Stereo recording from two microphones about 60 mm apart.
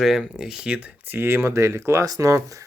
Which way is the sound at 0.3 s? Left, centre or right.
Centre.